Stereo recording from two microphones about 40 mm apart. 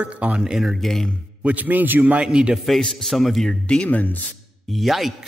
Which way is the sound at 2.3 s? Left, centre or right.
Right.